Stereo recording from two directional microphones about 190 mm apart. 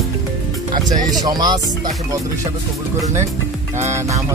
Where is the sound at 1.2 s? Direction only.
20° right (ahead or behind).